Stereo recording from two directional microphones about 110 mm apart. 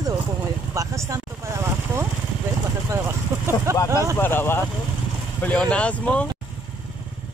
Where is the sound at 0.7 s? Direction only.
30° right (ahead or behind).